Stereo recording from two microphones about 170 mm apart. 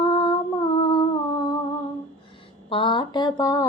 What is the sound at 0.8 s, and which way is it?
Humming, 25° left (ahead or behind).